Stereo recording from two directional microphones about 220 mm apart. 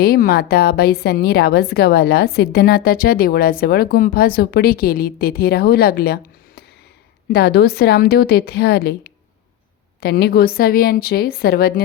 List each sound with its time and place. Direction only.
0.0 s a woman's voice: 45° left (ahead or behind)
7.3 s a woman's voice: 45° left (ahead or behind)